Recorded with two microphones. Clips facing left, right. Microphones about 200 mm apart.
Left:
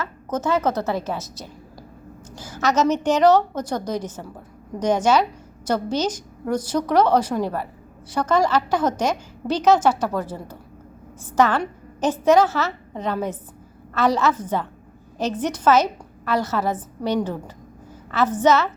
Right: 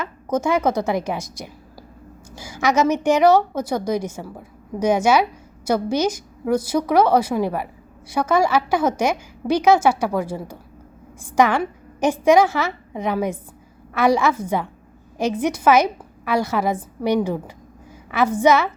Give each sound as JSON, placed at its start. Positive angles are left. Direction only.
{"t": 0.0, "sound": "a woman's voice", "side_deg": -10}